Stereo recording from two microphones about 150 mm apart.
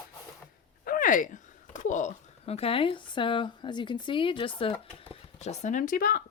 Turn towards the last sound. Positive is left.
turn(degrees=65)  # may be behind; listen again after turning